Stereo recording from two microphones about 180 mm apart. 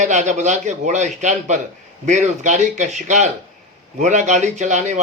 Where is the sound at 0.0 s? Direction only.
45° right (ahead or behind).